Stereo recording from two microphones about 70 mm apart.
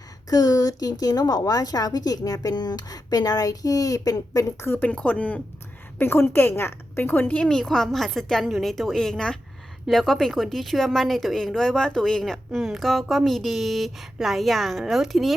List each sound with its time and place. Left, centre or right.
0.3 s a woman's voice: left
4.8 s speech: centre
6.0 s a woman's voice: left
7.3 s speech: centre